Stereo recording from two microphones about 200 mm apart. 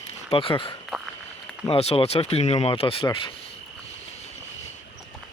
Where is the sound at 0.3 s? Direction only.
25° left (ahead or behind).